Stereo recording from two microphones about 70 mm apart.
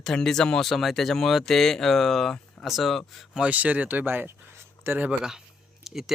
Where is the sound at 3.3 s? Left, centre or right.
Centre.